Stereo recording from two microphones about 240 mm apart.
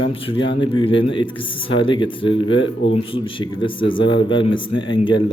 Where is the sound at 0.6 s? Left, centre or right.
Centre.